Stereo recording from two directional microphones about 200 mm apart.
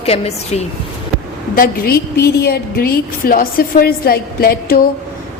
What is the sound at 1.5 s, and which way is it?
A woman's voice, 45° left (ahead or behind).